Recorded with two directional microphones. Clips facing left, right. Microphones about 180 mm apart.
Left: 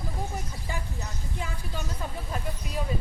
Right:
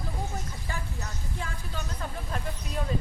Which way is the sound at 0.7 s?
15° left (ahead or behind).